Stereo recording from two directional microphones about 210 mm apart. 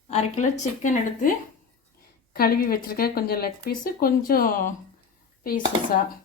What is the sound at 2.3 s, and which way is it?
A woman's voice, 45° left (ahead or behind).